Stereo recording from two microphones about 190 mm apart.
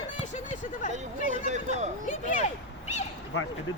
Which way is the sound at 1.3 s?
35° right (ahead or behind).